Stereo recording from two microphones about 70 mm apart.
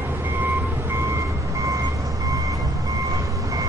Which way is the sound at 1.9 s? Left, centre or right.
Right.